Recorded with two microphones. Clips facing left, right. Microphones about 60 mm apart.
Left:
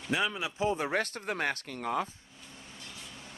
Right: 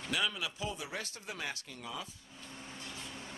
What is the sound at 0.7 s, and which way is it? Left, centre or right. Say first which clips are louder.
Speech: left 11 dB; left.